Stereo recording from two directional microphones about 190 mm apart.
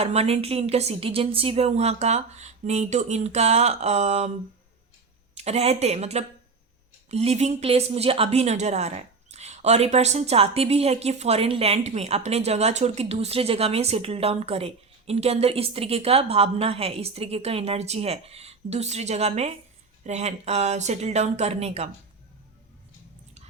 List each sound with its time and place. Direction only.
0.0 s a woman's voice: 35° right (ahead or behind)
5.4 s a woman's voice: 35° right (ahead or behind)